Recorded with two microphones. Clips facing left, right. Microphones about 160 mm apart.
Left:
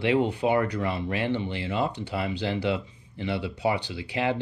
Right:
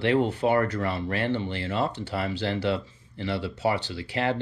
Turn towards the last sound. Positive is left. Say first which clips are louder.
# even
turn(degrees=5)  # may be behind; listen again after turning